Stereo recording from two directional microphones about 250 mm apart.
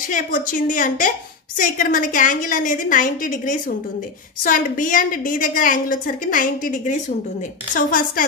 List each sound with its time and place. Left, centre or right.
0.1 s a woman's voice: left